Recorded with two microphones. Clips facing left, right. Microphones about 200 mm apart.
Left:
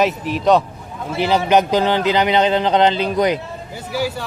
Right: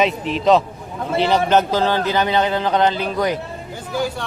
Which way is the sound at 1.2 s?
10° left (ahead or behind).